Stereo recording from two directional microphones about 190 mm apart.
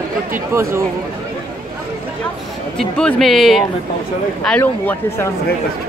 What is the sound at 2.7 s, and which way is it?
Speech, 5° left (ahead or behind).